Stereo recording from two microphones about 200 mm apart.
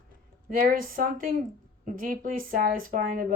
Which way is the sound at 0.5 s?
45° right (ahead or behind).